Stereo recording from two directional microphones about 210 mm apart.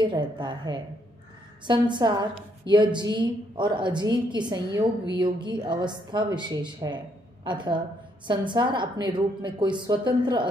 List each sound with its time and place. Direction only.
0.0 s a woman's voice: 20° right (ahead or behind)